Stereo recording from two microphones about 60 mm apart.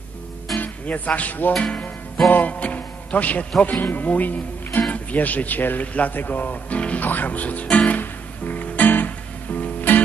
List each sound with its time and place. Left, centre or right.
0.6 s speech: left
8.0 s music: left